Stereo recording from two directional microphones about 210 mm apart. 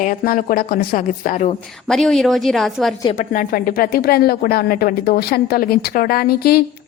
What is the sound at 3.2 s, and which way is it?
A woman's voice, 40° left (ahead or behind).